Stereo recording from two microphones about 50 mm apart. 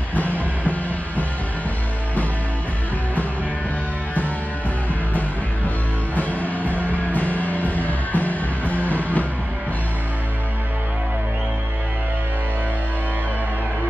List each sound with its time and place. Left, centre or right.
0.1 s music: left
6.1 s music: left